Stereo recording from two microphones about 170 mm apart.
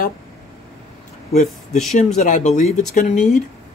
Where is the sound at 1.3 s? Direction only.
45° left (ahead or behind).